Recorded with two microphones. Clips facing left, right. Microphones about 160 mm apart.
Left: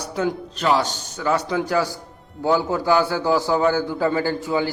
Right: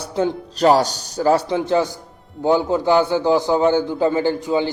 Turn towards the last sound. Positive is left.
turn(degrees=-20)  # may be behind; listen again after turning